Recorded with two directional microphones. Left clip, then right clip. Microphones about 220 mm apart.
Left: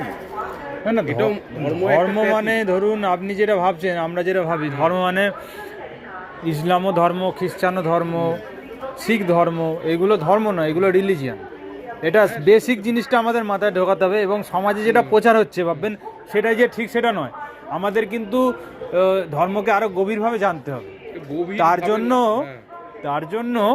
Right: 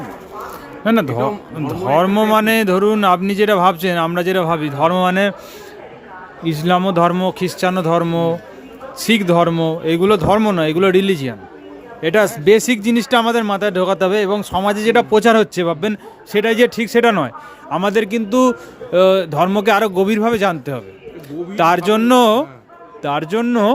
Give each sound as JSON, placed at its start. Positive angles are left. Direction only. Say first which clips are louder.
{"t": 2.0, "sound": "a man's voice", "louder": "right 3 dB", "side_deg": -50}
{"t": 2.3, "sound": "a man's voice", "louder": "right 5 dB", "side_deg": -35}
{"t": 6.4, "sound": "a man's voice", "louder": "right 3 dB", "side_deg": -35}
{"t": 16.3, "sound": "a man's voice", "louder": "right 3 dB", "side_deg": -45}
{"t": 21.8, "sound": "a man's voice", "louder": "right 6 dB", "side_deg": -40}